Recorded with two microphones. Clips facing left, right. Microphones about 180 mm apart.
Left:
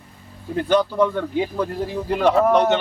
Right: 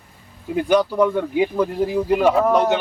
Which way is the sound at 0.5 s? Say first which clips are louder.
Right 1 dB; 10° right (ahead or behind).